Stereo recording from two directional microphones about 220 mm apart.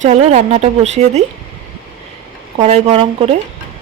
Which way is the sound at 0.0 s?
30° right (ahead or behind).